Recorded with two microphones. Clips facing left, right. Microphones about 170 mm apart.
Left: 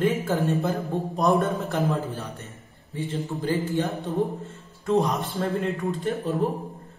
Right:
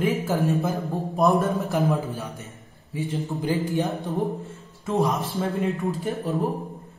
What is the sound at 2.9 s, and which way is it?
Speech, 10° right (ahead or behind).